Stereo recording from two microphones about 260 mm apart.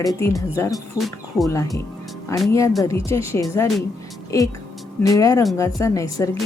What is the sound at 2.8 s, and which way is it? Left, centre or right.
A woman's voice, centre.